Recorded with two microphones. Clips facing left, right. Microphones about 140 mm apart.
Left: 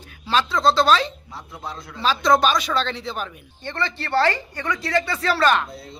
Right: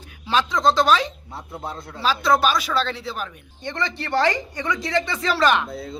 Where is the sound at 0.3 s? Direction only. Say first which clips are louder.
Even; 15° right (ahead or behind).